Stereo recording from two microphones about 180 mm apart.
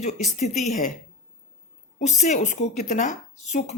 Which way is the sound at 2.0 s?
40° left (ahead or behind).